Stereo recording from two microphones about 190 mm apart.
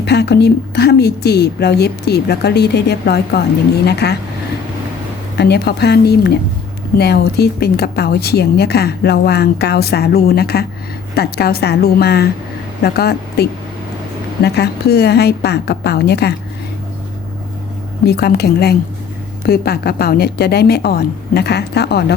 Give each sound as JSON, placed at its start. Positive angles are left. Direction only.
{"t": 0.0, "sound": "speech", "side_deg": 60}
{"t": 5.4, "sound": "speech", "side_deg": 60}
{"t": 18.0, "sound": "speech", "side_deg": 60}